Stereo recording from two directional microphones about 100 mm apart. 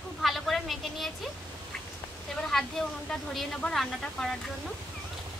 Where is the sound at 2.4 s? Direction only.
5° left (ahead or behind).